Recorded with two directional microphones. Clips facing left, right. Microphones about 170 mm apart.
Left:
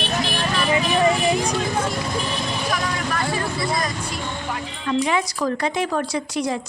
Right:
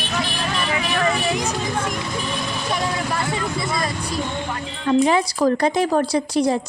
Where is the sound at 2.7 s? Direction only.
25° right (ahead or behind).